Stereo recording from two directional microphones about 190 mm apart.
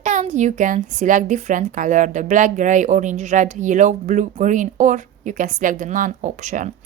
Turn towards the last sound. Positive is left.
turn(degrees=-40)  # may be behind; listen again after turning